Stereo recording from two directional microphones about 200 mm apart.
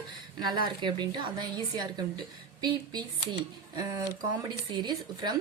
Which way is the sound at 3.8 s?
20° right (ahead or behind).